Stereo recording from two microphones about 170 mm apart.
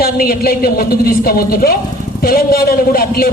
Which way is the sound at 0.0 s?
60° left (ahead or behind).